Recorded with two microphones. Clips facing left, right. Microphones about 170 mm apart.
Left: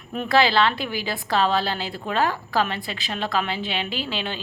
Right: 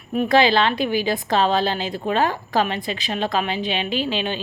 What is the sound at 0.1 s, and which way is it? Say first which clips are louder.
A woman's voice: right 3 dB; 15° right (ahead or behind).